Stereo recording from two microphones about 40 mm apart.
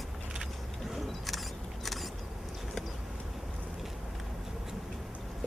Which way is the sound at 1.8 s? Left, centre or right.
Centre.